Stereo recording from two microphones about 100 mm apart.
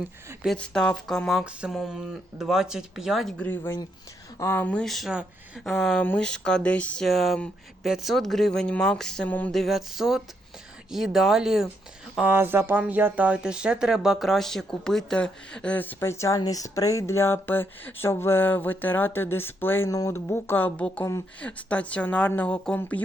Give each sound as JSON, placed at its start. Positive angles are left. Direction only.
{"t": 0.5, "sound": "speech", "side_deg": 10}
{"t": 3.3, "sound": "speech", "side_deg": 20}
{"t": 4.6, "sound": "speech", "side_deg": 10}
{"t": 7.0, "sound": "speech", "side_deg": 0}
{"t": 12.3, "sound": "speech", "side_deg": -25}
{"t": 19.9, "sound": "speech", "side_deg": 35}
{"t": 20.1, "sound": "speech", "side_deg": 25}